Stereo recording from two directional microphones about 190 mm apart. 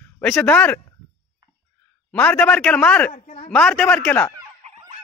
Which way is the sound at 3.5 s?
5° left (ahead or behind).